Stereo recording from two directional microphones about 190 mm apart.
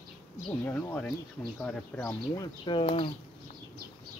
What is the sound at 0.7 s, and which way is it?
Speech, 10° left (ahead or behind).